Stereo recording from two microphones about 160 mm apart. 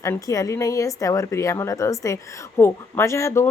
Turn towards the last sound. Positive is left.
turn(degrees=20)  # may be behind; listen again after turning